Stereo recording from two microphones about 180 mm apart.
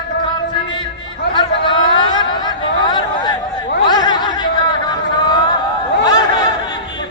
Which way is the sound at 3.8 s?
25° left (ahead or behind).